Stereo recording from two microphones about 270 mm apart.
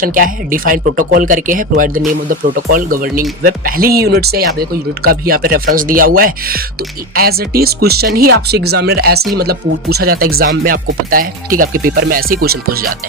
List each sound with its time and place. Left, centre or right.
0.0 s speech: right